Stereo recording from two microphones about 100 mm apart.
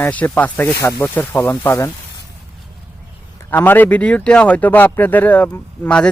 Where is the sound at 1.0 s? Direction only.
15° left (ahead or behind).